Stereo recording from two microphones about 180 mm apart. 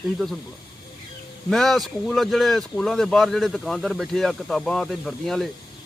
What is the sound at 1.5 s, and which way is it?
Speech, centre (ahead or behind).